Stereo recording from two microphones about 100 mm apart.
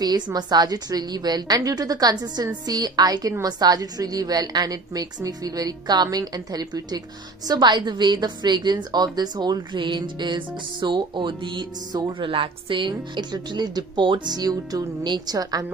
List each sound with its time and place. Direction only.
0.0 s a woman's voice: 40° right (ahead or behind)
12.1 s a woman's voice: 60° right (ahead or behind); by 15.6 s 40° right (ahead or behind)